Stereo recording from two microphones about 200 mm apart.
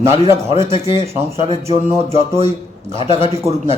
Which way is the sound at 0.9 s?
30° right (ahead or behind).